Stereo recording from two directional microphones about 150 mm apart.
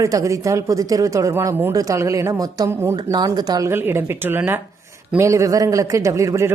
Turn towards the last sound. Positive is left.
turn(degrees=-20)  # may be behind; listen again after turning